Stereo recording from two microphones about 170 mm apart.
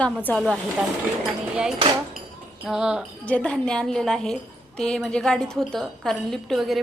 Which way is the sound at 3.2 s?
10° left (ahead or behind).